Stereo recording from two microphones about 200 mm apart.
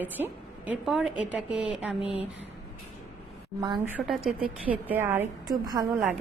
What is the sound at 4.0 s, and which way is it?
A woman's voice, centre (ahead or behind).